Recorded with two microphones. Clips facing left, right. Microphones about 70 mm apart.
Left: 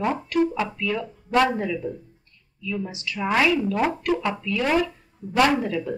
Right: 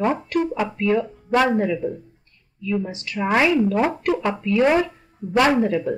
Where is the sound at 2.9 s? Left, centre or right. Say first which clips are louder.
Right 1 dB; right.